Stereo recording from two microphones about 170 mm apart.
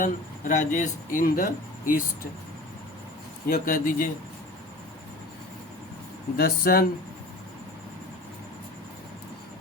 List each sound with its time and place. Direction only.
0.0 s speech: 50° left (ahead or behind)
3.5 s speech: 55° left (ahead or behind)
6.3 s speech: 65° left (ahead or behind)